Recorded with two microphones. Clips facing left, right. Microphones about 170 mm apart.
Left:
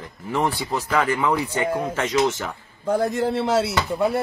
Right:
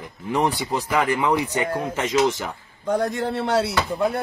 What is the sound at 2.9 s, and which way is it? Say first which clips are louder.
Speech: left 2 dB; centre (ahead or behind).